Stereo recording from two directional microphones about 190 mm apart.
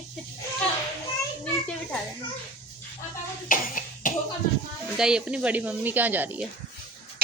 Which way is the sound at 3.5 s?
45° left (ahead or behind).